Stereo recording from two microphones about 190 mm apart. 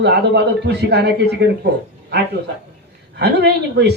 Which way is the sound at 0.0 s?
60° right (ahead or behind).